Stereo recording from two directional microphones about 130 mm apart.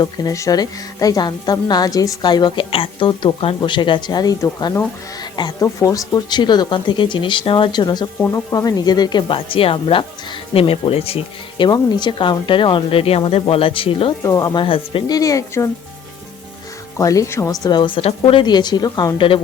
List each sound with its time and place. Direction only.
0.0 s a woman's voice: 25° left (ahead or behind); by 14.1 s 45° left (ahead or behind)
14.3 s speech: 25° left (ahead or behind)
14.6 s speech: 45° left (ahead or behind)
15.0 s speech: 30° left (ahead or behind)
17.0 s a woman's voice: 25° left (ahead or behind)